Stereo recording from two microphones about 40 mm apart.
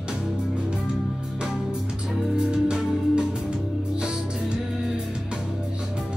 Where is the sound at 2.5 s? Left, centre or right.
Right.